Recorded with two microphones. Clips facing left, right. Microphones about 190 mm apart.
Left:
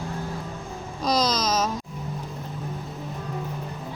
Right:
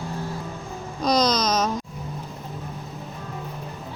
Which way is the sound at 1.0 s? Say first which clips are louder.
Right 3 dB; centre (ahead or behind).